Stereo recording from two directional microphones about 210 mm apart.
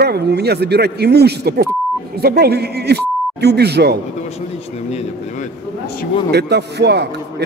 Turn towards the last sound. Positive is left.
turn(degrees=-50)  # may be behind; listen again after turning